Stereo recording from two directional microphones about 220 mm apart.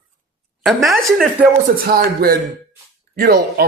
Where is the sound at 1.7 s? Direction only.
45° right (ahead or behind).